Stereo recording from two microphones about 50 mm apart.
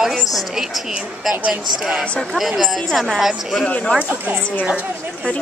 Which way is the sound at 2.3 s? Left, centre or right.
Centre.